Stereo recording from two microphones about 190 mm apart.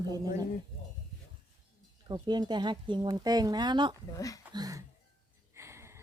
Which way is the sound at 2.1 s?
20° right (ahead or behind).